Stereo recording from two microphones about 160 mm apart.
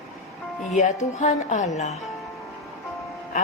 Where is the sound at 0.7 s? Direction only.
50° left (ahead or behind).